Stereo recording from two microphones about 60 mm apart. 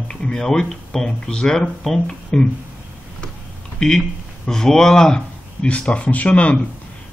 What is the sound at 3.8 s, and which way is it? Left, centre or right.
Speech, centre.